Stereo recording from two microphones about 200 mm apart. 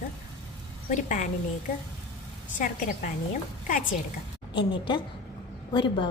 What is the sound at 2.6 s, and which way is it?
Speech, 40° left (ahead or behind).